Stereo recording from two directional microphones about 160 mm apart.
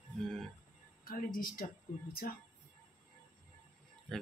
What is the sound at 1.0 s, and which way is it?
Speech, 65° left (ahead or behind).